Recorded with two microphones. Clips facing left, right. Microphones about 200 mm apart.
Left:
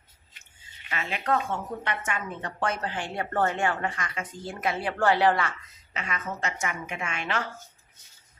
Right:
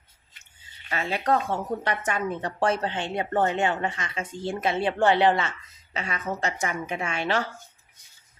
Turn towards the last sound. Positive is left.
turn(degrees=-35)  # may be behind; listen again after turning